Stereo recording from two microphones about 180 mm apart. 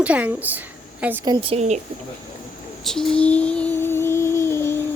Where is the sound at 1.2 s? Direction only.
25° right (ahead or behind).